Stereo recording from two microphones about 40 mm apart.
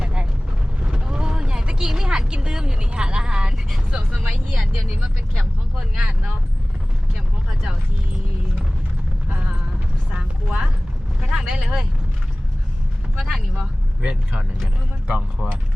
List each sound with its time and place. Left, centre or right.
0.0 s boat: right
0.8 s vehicle: right
3.9 s speech: right
5.7 s speech: right
10.2 s speech: centre
13.1 s speech: centre
14.0 s speech: right